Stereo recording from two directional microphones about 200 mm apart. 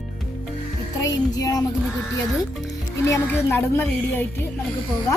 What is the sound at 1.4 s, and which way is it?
Music, 20° left (ahead or behind).